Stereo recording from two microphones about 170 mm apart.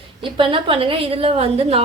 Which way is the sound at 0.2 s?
30° right (ahead or behind).